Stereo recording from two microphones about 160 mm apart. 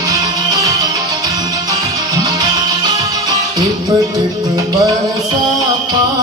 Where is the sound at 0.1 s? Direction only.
20° right (ahead or behind).